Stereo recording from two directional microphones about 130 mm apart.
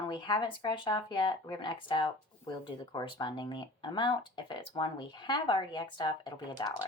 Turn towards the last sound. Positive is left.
turn(degrees=35)  # may be behind; listen again after turning